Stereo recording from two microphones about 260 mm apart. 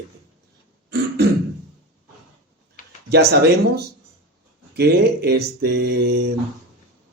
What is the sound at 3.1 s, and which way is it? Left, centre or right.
Speech, right.